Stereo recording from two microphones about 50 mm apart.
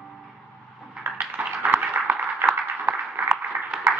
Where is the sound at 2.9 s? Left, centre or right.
Right.